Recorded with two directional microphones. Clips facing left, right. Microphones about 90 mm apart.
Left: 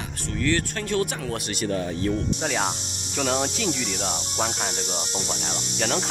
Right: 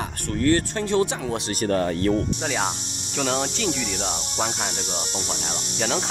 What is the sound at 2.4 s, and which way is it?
Speech, centre (ahead or behind).